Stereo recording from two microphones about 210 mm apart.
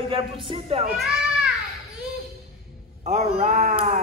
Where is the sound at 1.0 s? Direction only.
Centre (ahead or behind).